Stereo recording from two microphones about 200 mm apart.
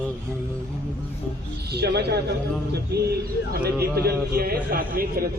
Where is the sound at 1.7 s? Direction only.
55° right (ahead or behind).